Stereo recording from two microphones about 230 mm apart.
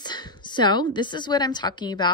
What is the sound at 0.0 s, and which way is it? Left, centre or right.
A woman's voice, centre.